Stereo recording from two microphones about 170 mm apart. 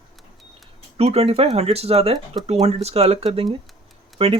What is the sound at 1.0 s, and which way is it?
Speech, 35° right (ahead or behind).